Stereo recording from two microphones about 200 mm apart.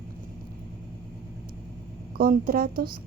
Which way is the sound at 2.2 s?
45° right (ahead or behind).